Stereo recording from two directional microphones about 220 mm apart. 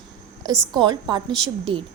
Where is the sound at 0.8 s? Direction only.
20° right (ahead or behind).